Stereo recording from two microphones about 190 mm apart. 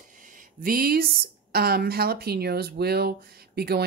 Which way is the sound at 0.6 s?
50° right (ahead or behind).